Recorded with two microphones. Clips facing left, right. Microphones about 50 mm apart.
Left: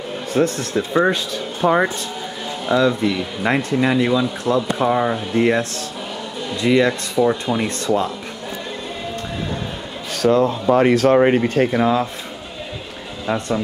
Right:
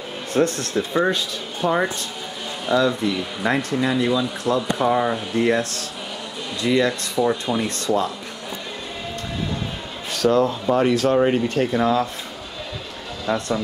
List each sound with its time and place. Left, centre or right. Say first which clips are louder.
0.3 s speech: left 1 dB; centre
0.7 s speech: left 3 dB; centre
1.1 s speech: left 3 dB; left
2.7 s speech: left 2 dB; centre
4.8 s speech: left 2 dB; centre; by 8.1 s left
10.2 s speech: left 2 dB; centre
10.7 s speech: left 6 dB; left
11.7 s speech: left 2 dB; centre
13.3 s speech: left 1 dB; centre